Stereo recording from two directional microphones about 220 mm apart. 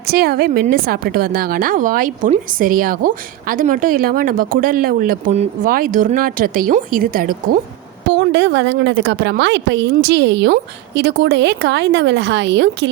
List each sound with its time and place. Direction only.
0.0 s a woman's voice: 45° right (ahead or behind)
8.1 s a woman's voice: 55° right (ahead or behind)